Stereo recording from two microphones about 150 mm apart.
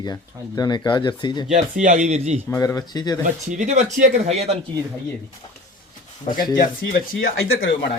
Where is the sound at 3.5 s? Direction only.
50° right (ahead or behind).